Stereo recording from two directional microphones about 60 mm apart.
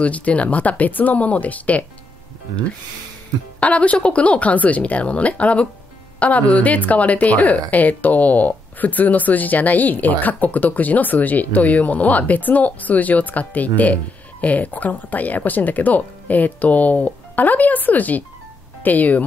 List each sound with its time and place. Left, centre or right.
0.0 s speech: left
3.5 s speech: left